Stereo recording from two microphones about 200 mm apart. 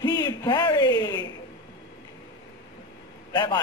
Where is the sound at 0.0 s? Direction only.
20° left (ahead or behind).